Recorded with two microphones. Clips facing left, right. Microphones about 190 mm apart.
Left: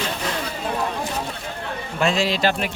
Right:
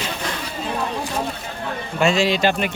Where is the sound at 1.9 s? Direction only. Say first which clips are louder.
Right 3 dB; centre (ahead or behind).